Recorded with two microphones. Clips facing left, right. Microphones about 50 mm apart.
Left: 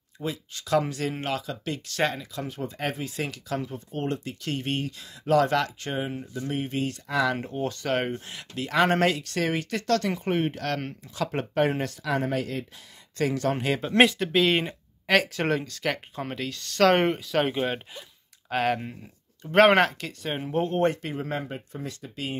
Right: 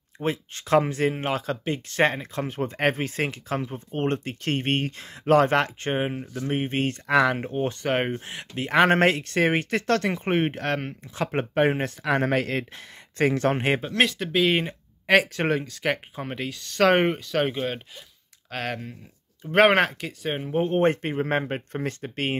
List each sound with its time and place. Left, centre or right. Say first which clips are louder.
0.2 s speech: right 5 dB; right
3.3 s speech: right 2 dB; right
7.3 s speech: right 3 dB; right
12.0 s speech: right 5 dB; right
14.0 s speech: right 1 dB; centre
17.2 s speech: even; centre
19.4 s speech: even; centre
20.6 s speech: right 4 dB; right